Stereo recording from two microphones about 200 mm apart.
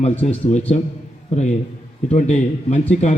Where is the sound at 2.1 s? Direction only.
35° left (ahead or behind).